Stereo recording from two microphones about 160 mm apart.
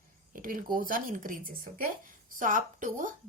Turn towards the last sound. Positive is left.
turn(degrees=-55)  # may be behind; listen again after turning